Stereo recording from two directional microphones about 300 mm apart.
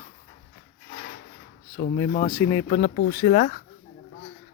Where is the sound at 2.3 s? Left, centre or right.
Centre.